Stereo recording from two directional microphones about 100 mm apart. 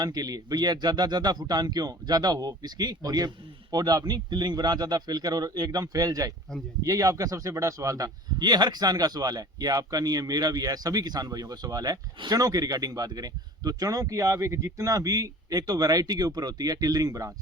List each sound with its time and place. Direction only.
0.0 s a man's voice: 40° right (ahead or behind)